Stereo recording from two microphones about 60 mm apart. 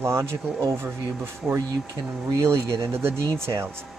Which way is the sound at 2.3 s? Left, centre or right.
Right.